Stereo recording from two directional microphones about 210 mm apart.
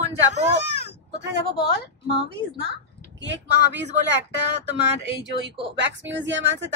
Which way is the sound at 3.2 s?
55° right (ahead or behind).